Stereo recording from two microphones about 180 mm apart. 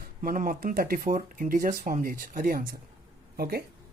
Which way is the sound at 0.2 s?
50° right (ahead or behind).